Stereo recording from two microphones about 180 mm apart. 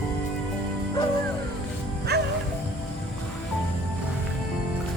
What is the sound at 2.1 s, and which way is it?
Music, 65° right (ahead or behind).